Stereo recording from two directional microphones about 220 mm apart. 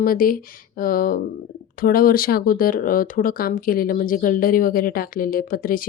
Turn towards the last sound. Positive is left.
turn(degrees=40)  # may be behind; listen again after turning